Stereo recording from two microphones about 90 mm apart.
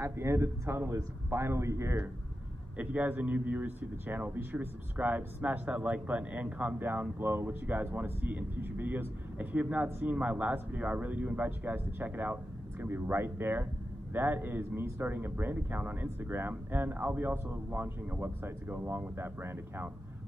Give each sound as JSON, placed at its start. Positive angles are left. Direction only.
{"t": 0.0, "sound": "speech", "side_deg": -30}
{"t": 2.8, "sound": "speech", "side_deg": -15}